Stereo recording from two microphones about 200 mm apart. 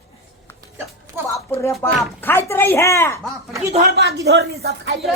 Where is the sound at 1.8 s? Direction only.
10° left (ahead or behind).